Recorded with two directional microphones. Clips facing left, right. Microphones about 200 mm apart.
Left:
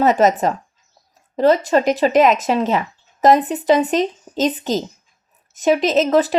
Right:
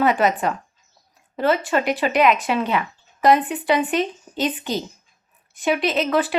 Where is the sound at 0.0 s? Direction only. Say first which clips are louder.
Left 4 dB; 40° left (ahead or behind).